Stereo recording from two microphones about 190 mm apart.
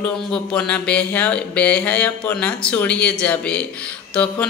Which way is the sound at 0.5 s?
5° left (ahead or behind).